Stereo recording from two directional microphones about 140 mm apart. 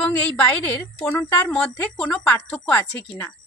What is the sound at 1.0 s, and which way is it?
Speech, 20° left (ahead or behind).